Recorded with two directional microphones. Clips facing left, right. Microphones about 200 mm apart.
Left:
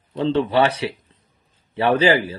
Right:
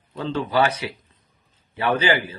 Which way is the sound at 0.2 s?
30° left (ahead or behind).